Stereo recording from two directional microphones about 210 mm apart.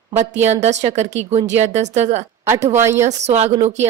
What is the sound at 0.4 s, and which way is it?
Speech, 30° right (ahead or behind).